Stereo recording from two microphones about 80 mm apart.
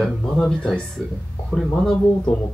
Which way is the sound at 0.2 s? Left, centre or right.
Centre.